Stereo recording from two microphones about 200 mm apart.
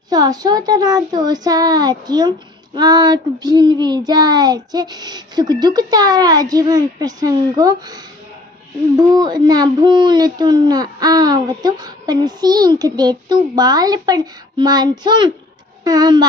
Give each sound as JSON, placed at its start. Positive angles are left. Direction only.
{"t": 0.1, "sound": "a child's voice", "side_deg": -20}